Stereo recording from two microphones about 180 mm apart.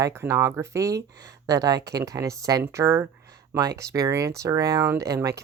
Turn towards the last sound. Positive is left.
turn(degrees=-20)  # may be behind; listen again after turning